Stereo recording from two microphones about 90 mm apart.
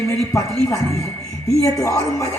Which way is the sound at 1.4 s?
35° left (ahead or behind).